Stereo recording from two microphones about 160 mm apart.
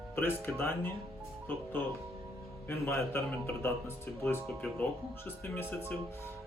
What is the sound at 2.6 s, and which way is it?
Speech, 15° left (ahead or behind).